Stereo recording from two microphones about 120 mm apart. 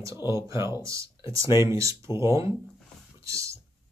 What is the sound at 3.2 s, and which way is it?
Clicking, 25° right (ahead or behind).